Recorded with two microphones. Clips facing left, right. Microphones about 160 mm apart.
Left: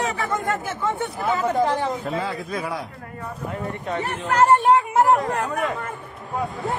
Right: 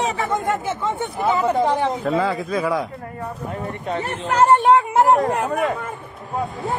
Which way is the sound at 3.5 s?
25° right (ahead or behind).